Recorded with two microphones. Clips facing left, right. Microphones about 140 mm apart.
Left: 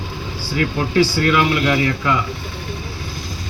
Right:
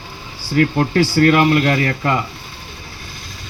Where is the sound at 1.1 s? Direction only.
45° right (ahead or behind).